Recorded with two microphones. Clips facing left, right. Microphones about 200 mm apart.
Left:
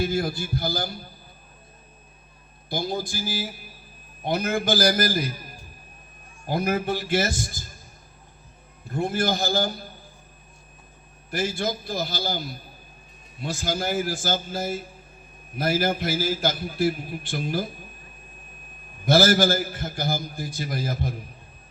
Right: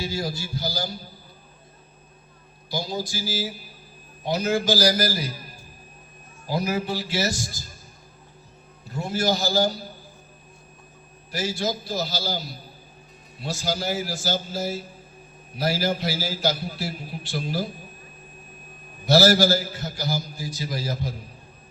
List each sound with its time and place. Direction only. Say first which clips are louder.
0.0 s a man's voice: left 4 dB; 55° left (ahead or behind)
2.6 s a man's voice: left 1 dB; 55° left (ahead or behind)
6.5 s a man's voice: left 1 dB; 55° left (ahead or behind)
8.9 s a man's voice: even; 55° left (ahead or behind)
11.3 s a man's voice: even; 55° left (ahead or behind)
19.0 s a man's voice: right 1 dB; 55° left (ahead or behind)